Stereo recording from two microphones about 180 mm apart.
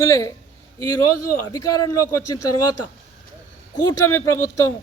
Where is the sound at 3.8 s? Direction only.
15° left (ahead or behind).